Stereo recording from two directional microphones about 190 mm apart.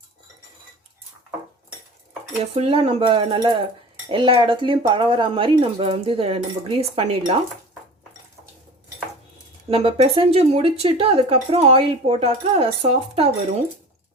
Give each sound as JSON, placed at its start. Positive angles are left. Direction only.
{"t": 2.4, "sound": "speech", "side_deg": -30}
{"t": 9.6, "sound": "speech", "side_deg": -30}